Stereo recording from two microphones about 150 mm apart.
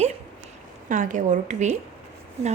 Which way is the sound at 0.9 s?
60° right (ahead or behind).